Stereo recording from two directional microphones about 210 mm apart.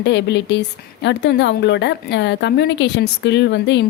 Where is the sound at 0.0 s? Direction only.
55° left (ahead or behind).